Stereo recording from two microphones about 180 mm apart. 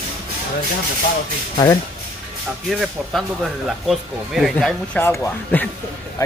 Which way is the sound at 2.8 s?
Centre (ahead or behind).